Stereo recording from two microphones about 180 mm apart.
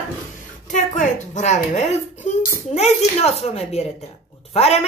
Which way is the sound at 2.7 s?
35° left (ahead or behind).